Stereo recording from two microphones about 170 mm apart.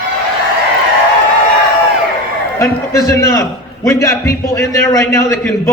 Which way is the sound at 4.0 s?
15° left (ahead or behind).